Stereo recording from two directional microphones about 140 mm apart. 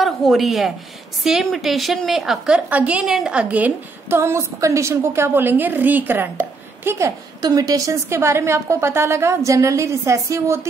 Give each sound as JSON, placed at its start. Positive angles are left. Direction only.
{"t": 0.0, "sound": "a woman's voice", "side_deg": 0}